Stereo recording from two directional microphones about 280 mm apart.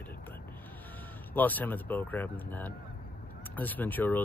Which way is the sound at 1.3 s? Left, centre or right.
Centre.